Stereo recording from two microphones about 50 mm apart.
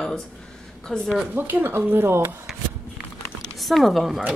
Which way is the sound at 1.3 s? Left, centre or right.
Right.